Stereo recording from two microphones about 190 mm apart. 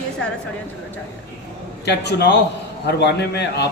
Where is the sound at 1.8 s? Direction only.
60° left (ahead or behind).